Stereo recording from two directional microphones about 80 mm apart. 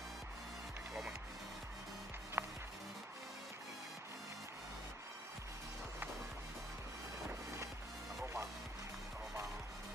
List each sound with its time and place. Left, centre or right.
2.4 s music: right